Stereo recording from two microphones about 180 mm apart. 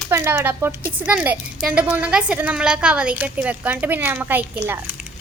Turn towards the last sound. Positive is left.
turn(degrees=-10)  # may be behind; listen again after turning